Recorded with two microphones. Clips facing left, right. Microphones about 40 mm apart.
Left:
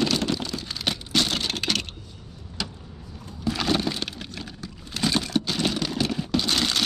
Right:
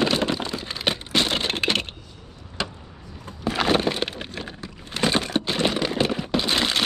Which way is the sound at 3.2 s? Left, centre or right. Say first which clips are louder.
Right 3 dB; right.